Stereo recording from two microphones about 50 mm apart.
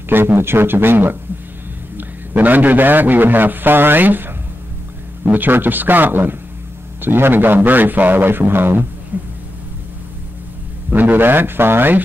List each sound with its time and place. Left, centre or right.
0.1 s a man's voice: right
9.1 s a sound: right
10.9 s a man's voice: right